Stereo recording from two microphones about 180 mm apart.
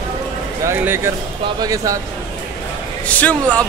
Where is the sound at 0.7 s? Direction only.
15° right (ahead or behind).